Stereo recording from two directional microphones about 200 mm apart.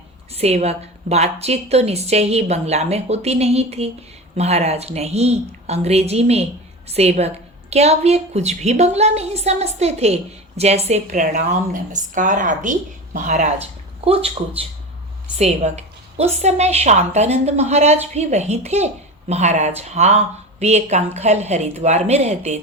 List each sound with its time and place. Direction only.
0.3 s a woman's voice: 30° right (ahead or behind)